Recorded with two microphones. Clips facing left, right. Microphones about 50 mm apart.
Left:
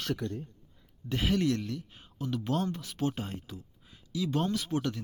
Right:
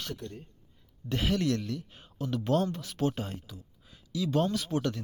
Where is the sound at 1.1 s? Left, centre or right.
Centre.